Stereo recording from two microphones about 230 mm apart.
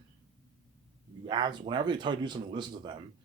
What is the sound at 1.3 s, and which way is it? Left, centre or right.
A man's voice, centre.